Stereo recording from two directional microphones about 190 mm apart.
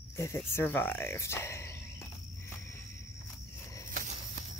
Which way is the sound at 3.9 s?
45° right (ahead or behind).